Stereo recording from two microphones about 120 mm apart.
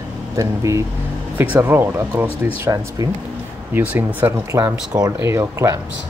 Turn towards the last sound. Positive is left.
turn(degrees=-25)  # may be behind; listen again after turning